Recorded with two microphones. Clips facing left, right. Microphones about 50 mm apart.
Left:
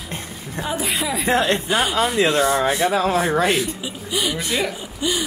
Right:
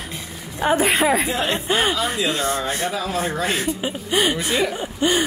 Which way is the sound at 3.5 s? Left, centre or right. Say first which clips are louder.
Left 1 dB; right.